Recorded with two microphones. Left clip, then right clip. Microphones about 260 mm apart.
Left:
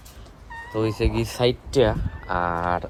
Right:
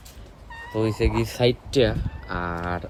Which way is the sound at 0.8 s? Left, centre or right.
Centre.